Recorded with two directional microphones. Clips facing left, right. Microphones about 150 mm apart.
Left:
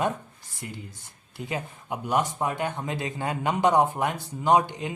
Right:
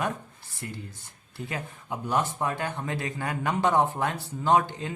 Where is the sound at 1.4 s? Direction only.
20° left (ahead or behind).